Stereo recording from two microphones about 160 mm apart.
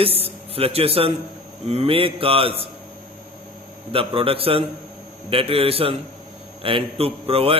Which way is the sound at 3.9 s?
35° right (ahead or behind).